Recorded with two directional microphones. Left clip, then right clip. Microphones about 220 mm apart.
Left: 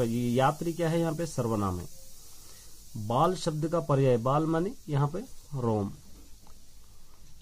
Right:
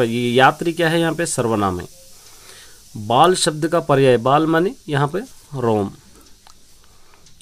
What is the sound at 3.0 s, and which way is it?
Speech, 25° right (ahead or behind).